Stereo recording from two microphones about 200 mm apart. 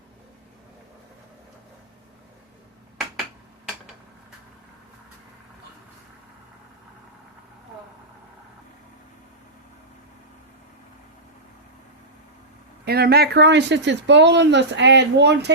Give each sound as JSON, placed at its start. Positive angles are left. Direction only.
{"t": 12.8, "sound": "speech", "side_deg": -50}